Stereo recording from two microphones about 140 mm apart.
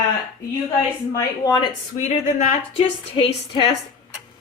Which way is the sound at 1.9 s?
50° left (ahead or behind).